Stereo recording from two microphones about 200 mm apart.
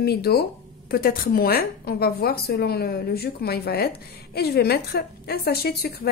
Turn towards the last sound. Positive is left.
turn(degrees=50)  # may be behind; listen again after turning